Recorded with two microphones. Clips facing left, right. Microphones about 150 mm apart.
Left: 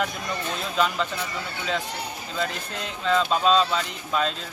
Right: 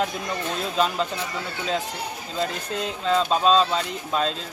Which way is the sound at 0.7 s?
30° right (ahead or behind).